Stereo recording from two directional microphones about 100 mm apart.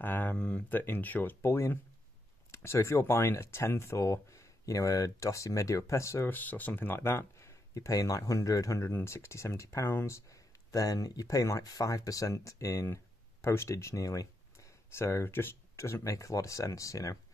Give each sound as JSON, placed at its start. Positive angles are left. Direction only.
{"t": 0.0, "sound": "speech", "side_deg": 20}